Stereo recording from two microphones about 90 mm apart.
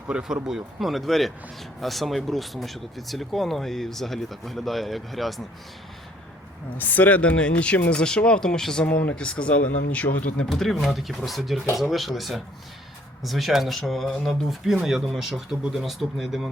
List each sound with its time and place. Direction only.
0.1 s speech: 10° right (ahead or behind)
6.7 s speech: 20° left (ahead or behind)
10.5 s speech: centre (ahead or behind)